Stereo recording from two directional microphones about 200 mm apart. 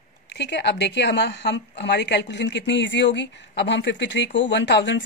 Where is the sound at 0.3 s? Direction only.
60° left (ahead or behind).